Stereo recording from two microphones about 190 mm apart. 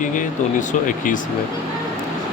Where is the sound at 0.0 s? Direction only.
45° left (ahead or behind).